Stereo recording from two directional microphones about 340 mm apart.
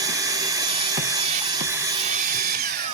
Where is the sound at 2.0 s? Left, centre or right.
Right.